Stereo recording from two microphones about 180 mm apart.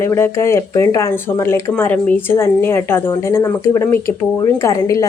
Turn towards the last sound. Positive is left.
turn(degrees=15)  # may be behind; listen again after turning